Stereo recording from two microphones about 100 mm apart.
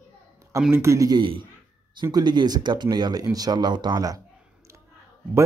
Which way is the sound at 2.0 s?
45° right (ahead or behind).